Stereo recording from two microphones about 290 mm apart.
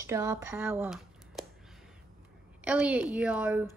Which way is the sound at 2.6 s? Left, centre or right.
Centre.